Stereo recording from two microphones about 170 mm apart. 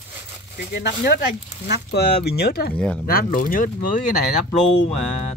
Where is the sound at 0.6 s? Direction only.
85° left.